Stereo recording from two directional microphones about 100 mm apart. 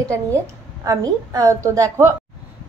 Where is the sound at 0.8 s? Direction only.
40° right (ahead or behind).